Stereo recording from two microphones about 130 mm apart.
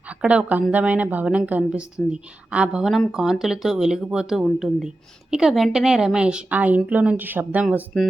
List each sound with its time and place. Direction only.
0.1 s a woman's voice: 10° right (ahead or behind)